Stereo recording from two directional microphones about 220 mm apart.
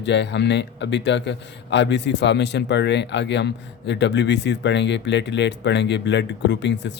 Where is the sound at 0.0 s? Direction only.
50° left (ahead or behind).